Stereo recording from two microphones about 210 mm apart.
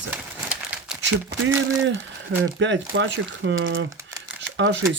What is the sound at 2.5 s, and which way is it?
Speech, 65° right (ahead or behind).